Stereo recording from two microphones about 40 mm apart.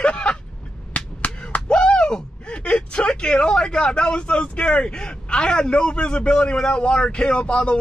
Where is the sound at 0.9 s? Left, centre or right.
Left.